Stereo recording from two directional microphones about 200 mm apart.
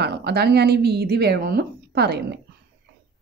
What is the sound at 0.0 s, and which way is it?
Speech, 55° right (ahead or behind).